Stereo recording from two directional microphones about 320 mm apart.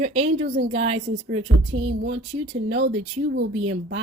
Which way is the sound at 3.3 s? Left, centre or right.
Right.